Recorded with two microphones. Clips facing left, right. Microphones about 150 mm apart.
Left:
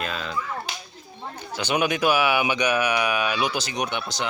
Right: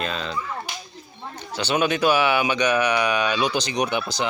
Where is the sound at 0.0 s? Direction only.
5° left (ahead or behind).